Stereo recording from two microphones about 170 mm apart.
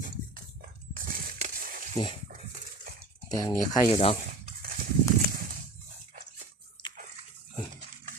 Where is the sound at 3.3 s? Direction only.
25° left (ahead or behind).